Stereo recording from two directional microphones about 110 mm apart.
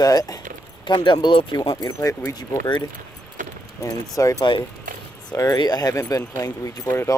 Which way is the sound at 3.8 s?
30° left (ahead or behind).